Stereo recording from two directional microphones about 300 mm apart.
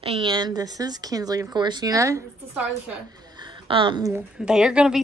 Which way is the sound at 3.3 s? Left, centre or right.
Centre.